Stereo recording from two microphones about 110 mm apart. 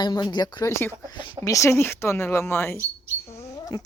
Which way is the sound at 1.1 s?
45° left (ahead or behind).